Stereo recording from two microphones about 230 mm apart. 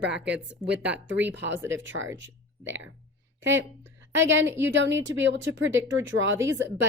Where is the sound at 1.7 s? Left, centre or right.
Right.